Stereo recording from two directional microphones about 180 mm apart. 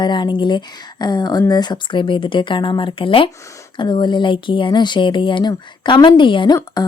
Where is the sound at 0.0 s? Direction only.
25° left (ahead or behind).